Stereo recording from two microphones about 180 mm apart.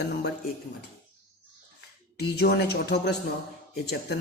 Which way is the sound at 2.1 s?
65° left (ahead or behind).